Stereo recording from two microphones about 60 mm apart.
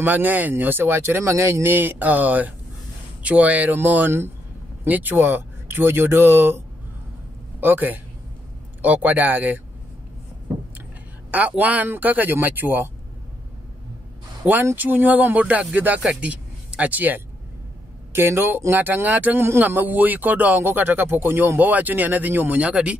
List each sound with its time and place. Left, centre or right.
0.0 s speech: right
1.8 s speech: right
7.6 s speech: right
11.3 s speech: right
14.4 s speech: right
18.1 s speech: right